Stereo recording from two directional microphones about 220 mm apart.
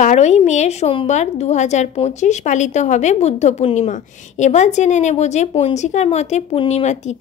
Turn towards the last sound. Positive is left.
turn(degrees=30)  # may be behind; listen again after turning